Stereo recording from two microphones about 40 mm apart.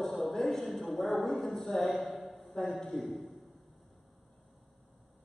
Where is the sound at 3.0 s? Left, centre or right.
Centre.